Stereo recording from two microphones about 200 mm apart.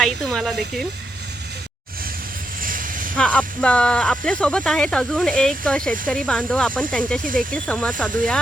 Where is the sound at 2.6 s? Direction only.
45° right (ahead or behind).